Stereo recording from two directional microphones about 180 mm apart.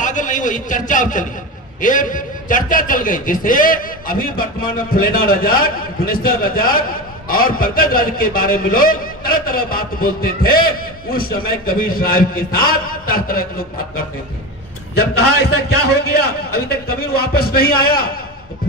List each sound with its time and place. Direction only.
0.0 s a man's voice: 45° left (ahead or behind)
15.0 s a man's voice: 65° left (ahead or behind)